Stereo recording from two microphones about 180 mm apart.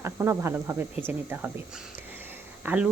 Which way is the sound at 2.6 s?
5° right (ahead or behind).